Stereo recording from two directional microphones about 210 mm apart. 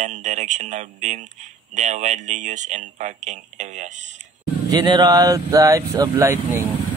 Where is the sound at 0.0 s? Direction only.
35° right (ahead or behind).